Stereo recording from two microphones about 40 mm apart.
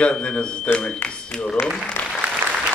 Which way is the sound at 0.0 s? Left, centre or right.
Left.